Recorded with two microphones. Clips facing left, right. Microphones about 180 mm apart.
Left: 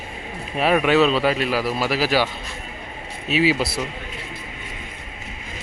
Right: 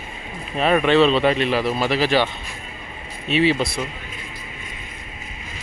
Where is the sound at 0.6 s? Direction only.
5° left (ahead or behind).